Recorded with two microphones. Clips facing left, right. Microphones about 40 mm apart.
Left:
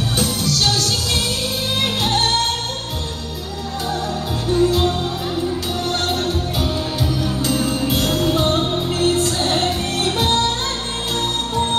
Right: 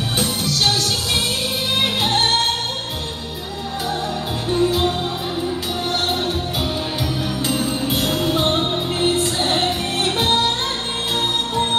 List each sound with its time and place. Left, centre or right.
0.2 s music: right
4.6 s music: right
7.9 s music: centre